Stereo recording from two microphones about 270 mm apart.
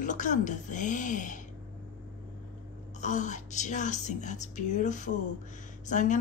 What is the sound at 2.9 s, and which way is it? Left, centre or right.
Speech, left.